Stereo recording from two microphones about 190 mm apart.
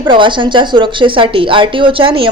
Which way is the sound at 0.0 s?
25° right (ahead or behind).